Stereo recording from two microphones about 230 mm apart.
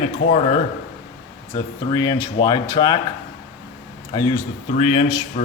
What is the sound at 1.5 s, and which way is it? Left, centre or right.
Speech, centre.